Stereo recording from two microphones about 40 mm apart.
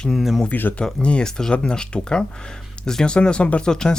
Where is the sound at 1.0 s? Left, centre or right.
Left.